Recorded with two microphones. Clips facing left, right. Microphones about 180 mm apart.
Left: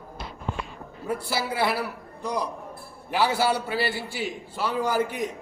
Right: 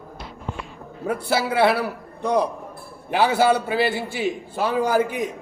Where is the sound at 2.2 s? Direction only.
60° right (ahead or behind).